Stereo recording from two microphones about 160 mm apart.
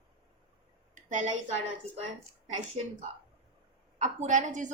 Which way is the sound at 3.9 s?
45° right (ahead or behind).